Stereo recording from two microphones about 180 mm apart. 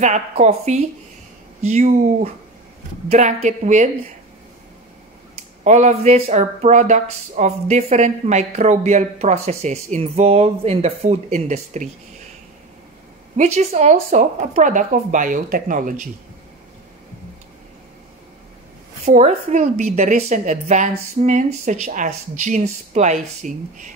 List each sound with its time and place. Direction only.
0.0 s speech: 40° right (ahead or behind)
5.3 s speech: 40° right (ahead or behind)
13.4 s speech: 35° right (ahead or behind)
19.0 s speech: 40° right (ahead or behind)